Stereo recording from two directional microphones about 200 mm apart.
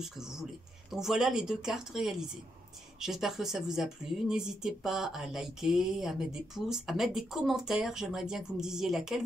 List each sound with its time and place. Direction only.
0.0 s a woman's voice: centre (ahead or behind)